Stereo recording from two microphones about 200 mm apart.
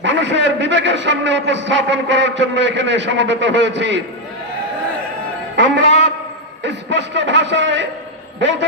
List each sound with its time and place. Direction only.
0.0 s a man's voice: 65° right (ahead or behind)
5.5 s music: 65° right (ahead or behind)
6.6 s a sound: 60° right (ahead or behind)
8.4 s a man's voice: 65° right (ahead or behind)